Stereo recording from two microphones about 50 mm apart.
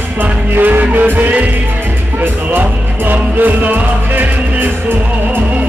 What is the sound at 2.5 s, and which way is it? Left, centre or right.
Music, right.